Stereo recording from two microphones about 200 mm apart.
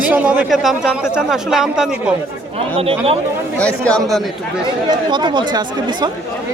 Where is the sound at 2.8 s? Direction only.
30° right (ahead or behind).